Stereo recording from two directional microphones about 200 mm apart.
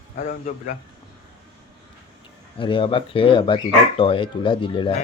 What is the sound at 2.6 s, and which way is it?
Speech, 25° left (ahead or behind).